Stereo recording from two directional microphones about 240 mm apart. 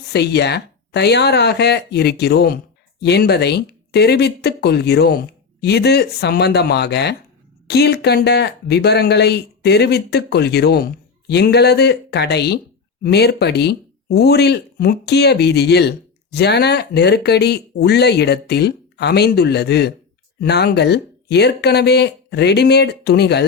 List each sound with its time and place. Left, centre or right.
0.1 s speech: left